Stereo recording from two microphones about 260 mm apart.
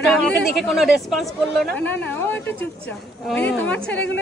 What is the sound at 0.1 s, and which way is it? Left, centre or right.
Speech, centre.